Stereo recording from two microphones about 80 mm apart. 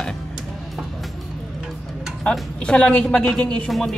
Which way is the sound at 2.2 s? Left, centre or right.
Centre.